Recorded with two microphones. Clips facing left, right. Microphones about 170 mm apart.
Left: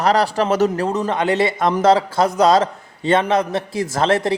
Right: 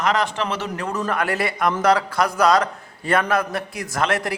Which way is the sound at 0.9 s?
20° left (ahead or behind).